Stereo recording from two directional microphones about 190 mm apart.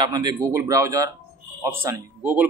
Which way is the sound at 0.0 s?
20° right (ahead or behind).